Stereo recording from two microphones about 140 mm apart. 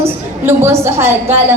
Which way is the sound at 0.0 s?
20° right (ahead or behind).